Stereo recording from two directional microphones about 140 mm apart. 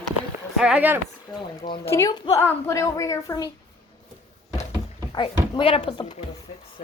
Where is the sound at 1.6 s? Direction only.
35° left (ahead or behind).